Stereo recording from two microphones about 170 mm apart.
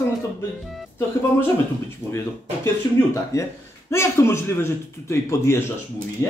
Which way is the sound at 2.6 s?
15° left (ahead or behind).